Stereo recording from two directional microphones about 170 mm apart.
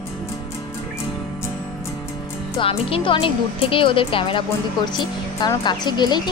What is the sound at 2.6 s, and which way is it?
Speech, 35° left (ahead or behind).